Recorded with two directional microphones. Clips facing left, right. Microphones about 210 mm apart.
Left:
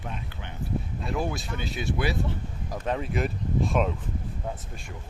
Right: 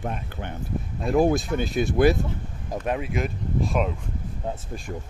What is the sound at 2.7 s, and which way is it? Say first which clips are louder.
Speech: right 3 dB; 15° right (ahead or behind).